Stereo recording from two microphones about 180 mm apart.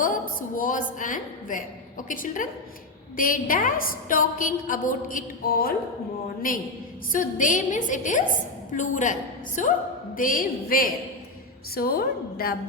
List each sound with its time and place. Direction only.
0.0 s a woman's voice: 50° left (ahead or behind)
7.1 s a woman's voice: 45° left (ahead or behind)